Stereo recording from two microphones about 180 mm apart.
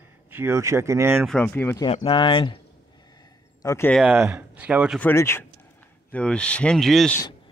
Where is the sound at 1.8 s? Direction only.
30° left (ahead or behind).